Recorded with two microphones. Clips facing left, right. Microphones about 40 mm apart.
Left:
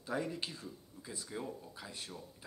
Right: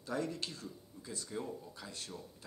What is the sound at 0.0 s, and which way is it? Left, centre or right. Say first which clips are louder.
Speech: even; centre.